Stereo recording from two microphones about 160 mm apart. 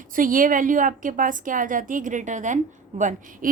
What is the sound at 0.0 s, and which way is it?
A woman's voice, 60° right (ahead or behind).